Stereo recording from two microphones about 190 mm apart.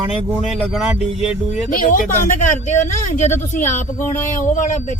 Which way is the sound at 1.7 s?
45° left (ahead or behind).